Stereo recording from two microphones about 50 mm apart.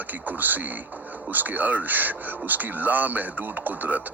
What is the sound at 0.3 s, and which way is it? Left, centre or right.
Speech, right.